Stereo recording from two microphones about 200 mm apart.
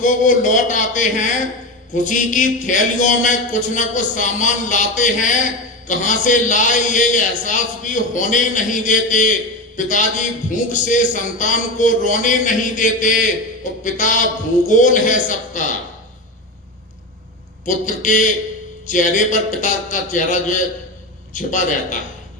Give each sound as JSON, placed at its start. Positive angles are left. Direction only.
{"t": 0.0, "sound": "a man's voice", "side_deg": 40}
{"t": 17.7, "sound": "a man's voice", "side_deg": 40}